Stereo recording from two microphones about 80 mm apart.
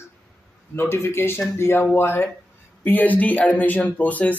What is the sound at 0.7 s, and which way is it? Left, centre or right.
Speech, left.